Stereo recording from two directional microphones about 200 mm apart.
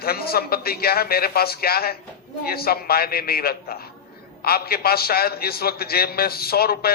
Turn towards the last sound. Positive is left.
turn(degrees=50)  # may be behind; listen again after turning